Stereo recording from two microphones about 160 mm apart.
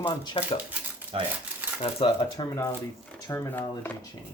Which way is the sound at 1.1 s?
35° right (ahead or behind).